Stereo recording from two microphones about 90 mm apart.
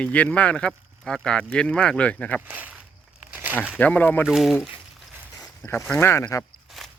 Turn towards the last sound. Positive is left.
turn(degrees=0)  # may be behind; listen again after turning